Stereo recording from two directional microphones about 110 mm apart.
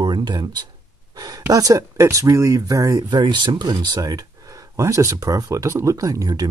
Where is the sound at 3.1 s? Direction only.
45° right (ahead or behind).